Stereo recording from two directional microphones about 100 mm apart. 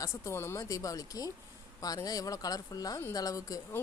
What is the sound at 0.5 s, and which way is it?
A woman's voice, 35° left (ahead or behind).